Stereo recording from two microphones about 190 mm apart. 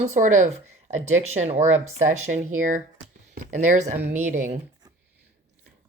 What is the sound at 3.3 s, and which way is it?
Speech, 45° right (ahead or behind).